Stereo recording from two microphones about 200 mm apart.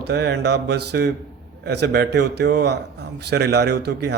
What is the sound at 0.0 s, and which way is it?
Speech, 55° right (ahead or behind).